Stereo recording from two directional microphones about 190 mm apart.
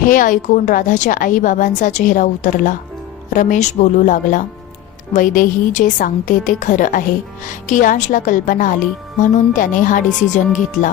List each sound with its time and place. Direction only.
0.0 s a woman's voice: 45° left (ahead or behind)